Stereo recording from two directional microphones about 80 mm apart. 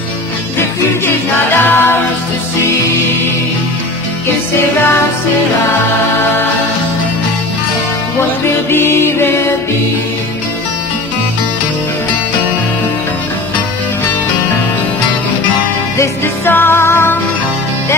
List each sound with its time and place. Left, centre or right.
0.6 s music: left
8.7 s music: left
16.0 s music: left